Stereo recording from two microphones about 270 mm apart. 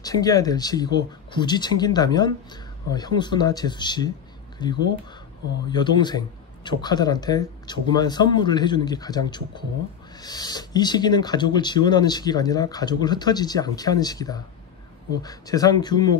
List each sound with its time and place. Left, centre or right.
0.0 s speech: centre